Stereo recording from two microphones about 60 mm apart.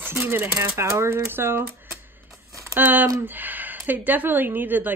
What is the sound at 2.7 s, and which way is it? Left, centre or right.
A woman's voice, right.